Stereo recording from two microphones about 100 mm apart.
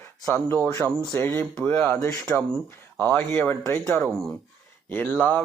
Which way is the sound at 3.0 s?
20° left (ahead or behind).